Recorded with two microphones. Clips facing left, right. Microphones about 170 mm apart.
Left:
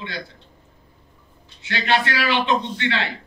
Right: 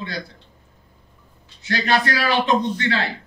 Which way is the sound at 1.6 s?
40° right (ahead or behind).